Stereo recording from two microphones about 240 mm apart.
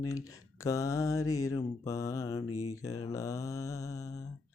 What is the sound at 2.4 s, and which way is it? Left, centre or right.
Mantra, left.